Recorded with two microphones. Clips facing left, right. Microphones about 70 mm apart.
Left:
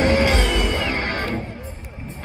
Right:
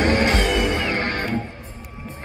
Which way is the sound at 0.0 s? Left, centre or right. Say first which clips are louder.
Left 1 dB; right.